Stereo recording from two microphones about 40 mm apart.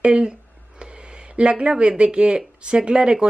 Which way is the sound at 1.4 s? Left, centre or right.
Right.